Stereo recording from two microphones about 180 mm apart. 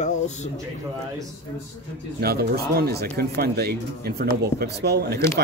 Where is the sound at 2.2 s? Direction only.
60° right (ahead or behind).